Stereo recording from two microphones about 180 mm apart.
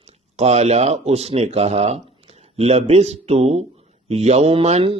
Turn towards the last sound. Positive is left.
turn(degrees=-35)  # may be behind; listen again after turning